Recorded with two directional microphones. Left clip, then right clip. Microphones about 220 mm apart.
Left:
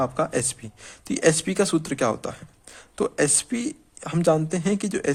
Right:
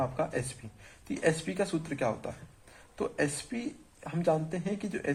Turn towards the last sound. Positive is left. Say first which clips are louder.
# left 10 dB
turn(degrees=50)  # may be behind; listen again after turning